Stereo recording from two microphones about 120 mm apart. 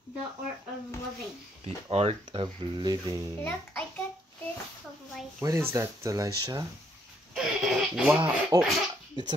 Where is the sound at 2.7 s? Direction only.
35° right (ahead or behind).